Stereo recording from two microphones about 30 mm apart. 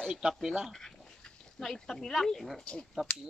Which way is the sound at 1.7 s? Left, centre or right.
Centre.